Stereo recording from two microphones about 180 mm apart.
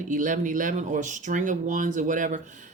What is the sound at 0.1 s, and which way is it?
Speech, 45° right (ahead or behind).